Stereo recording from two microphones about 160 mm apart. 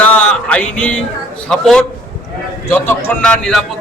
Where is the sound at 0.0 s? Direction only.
10° left (ahead or behind).